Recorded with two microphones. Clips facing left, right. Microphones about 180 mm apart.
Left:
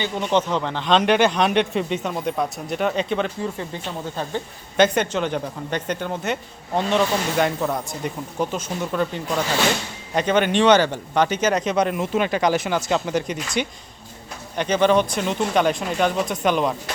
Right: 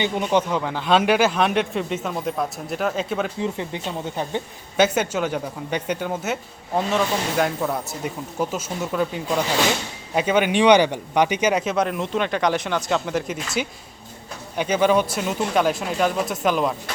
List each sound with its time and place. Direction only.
0.0 s speech: 10° right (ahead or behind)
3.4 s speech: 20° right (ahead or behind)
4.8 s speech: 5° right (ahead or behind)